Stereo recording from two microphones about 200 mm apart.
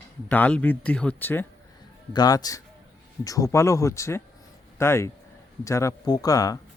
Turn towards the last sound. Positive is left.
turn(degrees=15)  # may be behind; listen again after turning